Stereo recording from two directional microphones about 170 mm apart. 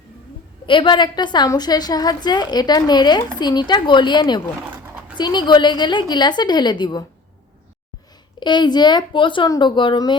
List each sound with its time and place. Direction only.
0.6 s a woman's voice: 30° left (ahead or behind)
8.4 s a woman's voice: 25° left (ahead or behind)